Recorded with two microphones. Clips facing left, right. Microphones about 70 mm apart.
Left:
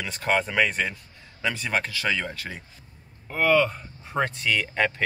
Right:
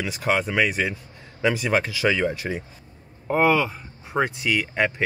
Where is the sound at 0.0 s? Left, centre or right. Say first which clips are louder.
Right 2 dB; centre; by 3.5 s right.